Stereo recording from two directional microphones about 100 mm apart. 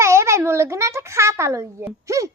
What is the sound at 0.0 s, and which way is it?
A child's voice, 30° right (ahead or behind).